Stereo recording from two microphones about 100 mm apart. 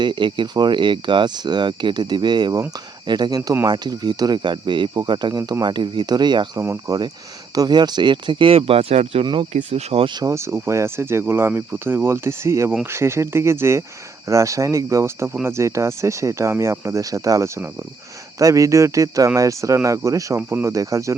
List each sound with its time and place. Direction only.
0.0 s speech: 55° right (ahead or behind)
6.6 s speech: 25° right (ahead or behind)
7.5 s speech: 40° right (ahead or behind); by 10.1 s 90° right
10.2 s speech: 30° right (ahead or behind)